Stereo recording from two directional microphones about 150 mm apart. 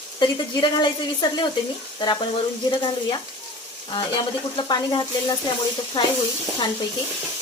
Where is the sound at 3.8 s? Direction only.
30° left (ahead or behind).